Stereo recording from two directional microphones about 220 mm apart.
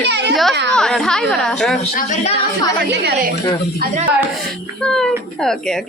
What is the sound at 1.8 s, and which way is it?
Speech, 30° left (ahead or behind).